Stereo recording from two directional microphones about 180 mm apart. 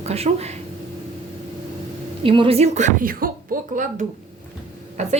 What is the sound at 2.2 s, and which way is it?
A woman's voice, 30° right (ahead or behind).